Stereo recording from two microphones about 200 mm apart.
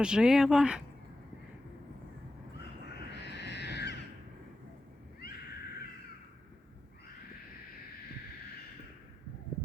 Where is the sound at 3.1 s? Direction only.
60° left (ahead or behind).